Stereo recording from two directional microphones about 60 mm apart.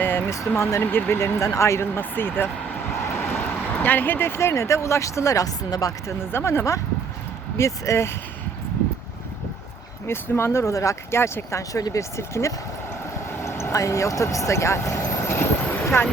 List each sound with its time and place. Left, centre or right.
0.0 s a sound: left
0.8 s speech: left
1.5 s speech: left
2.0 s speech: left
2.9 s vehicle: left
3.7 s speech: left
6.3 s speech: left
10.1 s speech: left
11.1 s speech: left
11.7 s speech: left
12.1 s speech: left
13.3 s vehicle: left
13.7 s speech: left